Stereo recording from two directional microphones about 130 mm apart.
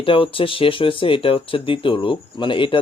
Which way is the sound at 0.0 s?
40° left (ahead or behind).